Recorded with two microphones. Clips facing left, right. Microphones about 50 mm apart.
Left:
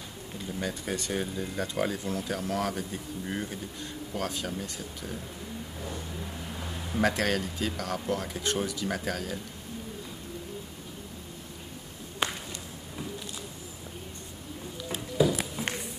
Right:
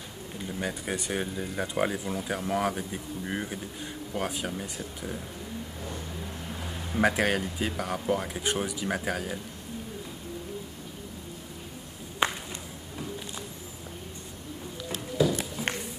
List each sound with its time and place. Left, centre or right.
0.5 s speech: centre
5.8 s vehicle: centre
7.0 s speech: centre
12.2 s a sound: right
14.8 s music: centre